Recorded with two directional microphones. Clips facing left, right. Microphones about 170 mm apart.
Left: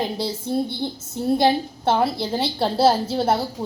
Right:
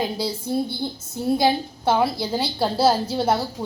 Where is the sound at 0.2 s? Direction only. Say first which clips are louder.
Left 1 dB; 25° left (ahead or behind).